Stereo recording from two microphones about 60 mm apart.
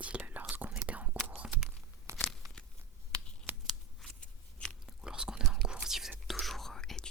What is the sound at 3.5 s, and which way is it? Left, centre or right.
Scissors, right.